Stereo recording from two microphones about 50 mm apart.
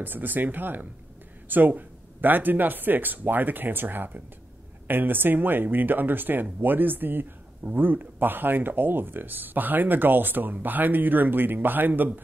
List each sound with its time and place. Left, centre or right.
0.0 s speech: right